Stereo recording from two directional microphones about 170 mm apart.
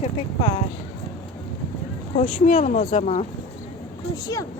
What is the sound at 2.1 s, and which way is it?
Speech, 40° left (ahead or behind).